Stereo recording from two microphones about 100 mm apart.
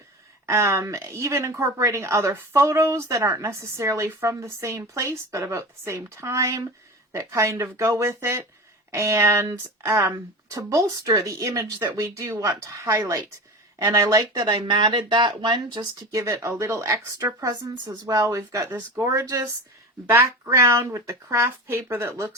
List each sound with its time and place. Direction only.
0.4 s speech: 30° right (ahead or behind)
14.3 s speech: 45° right (ahead or behind)
16.1 s speech: 30° right (ahead or behind)